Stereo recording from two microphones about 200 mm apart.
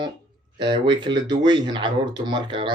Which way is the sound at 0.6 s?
25° right (ahead or behind).